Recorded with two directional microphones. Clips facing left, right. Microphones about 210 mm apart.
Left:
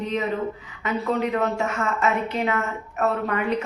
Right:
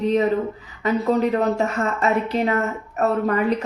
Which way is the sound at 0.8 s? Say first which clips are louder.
Right 5 dB; 35° right (ahead or behind).